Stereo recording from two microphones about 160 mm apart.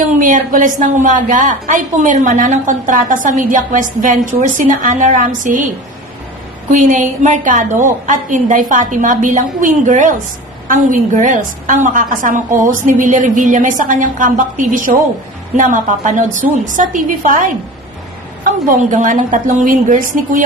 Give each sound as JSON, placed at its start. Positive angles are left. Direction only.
{"t": 0.2, "sound": "a woman's voice", "side_deg": -60}
{"t": 6.7, "sound": "a woman's voice", "side_deg": -55}